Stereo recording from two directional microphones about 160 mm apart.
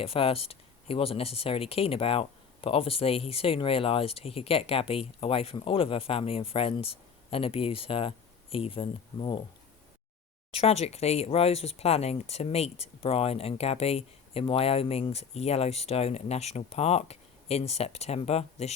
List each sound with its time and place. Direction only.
0.0 s speech: 35° left (ahead or behind)
10.5 s speech: 40° left (ahead or behind)